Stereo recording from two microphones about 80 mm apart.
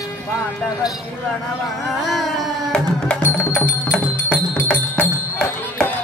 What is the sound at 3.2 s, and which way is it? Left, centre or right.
Music, left.